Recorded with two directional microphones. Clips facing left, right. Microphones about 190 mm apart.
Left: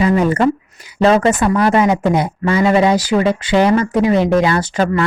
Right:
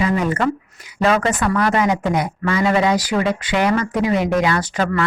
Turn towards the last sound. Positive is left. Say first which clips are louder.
# left 4 dB
turn(degrees=25)  # may be behind; listen again after turning